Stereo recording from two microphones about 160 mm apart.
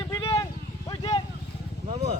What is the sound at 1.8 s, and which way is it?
Vehicle, 45° right (ahead or behind).